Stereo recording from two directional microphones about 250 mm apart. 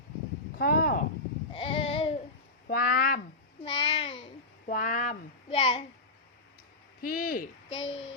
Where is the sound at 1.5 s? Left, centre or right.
Left.